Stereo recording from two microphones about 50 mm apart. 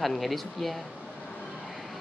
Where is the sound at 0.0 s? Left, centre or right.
Centre.